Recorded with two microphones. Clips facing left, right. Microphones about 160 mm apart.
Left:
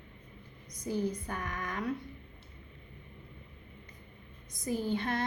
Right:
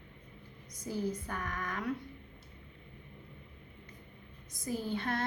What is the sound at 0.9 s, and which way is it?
Speech, 20° left (ahead or behind).